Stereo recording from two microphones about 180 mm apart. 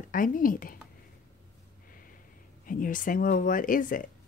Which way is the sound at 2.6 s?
50° left (ahead or behind).